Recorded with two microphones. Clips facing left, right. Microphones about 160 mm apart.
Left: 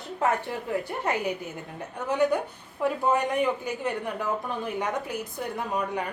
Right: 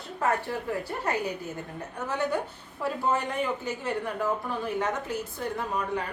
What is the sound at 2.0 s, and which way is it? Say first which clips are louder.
A woman's voice: left 5 dB; 15° left (ahead or behind).